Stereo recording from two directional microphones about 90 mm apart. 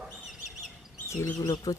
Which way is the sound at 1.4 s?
45° left (ahead or behind).